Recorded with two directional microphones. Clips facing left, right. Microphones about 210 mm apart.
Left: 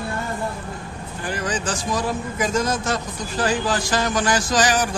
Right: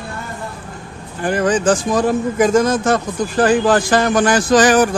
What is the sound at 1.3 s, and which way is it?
A man's voice, 55° right (ahead or behind).